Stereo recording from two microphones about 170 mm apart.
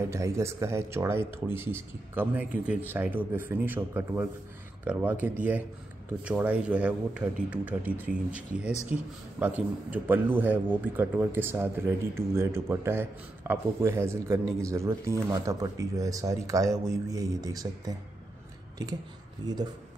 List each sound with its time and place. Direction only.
0.1 s a man's voice: 15° right (ahead or behind)
19.4 s speech: 25° right (ahead or behind)